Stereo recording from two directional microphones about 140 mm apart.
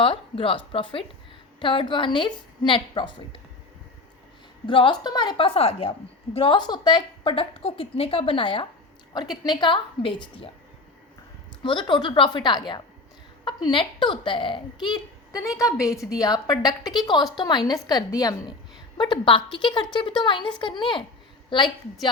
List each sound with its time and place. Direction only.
0.0 s a woman's voice: 40° left (ahead or behind)
4.6 s a woman's voice: 35° left (ahead or behind)
11.6 s a woman's voice: 35° left (ahead or behind)